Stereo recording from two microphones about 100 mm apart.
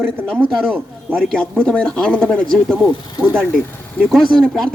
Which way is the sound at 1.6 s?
10° left (ahead or behind).